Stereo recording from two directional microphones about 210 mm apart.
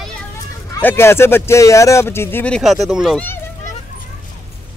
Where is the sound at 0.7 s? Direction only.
10° left (ahead or behind).